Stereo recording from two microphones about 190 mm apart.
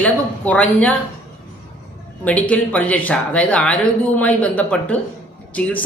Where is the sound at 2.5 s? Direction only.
10° left (ahead or behind).